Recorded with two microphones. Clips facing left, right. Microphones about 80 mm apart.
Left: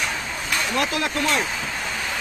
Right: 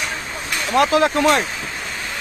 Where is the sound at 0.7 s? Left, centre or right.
Right.